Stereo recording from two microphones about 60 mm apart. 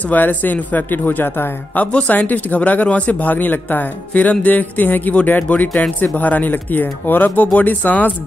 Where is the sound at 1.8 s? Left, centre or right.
Centre.